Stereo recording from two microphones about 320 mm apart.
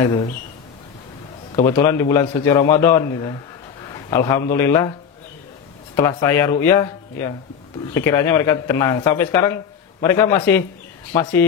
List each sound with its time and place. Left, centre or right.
0.0 s a man's voice: centre
1.5 s a man's voice: centre
5.9 s a man's voice: centre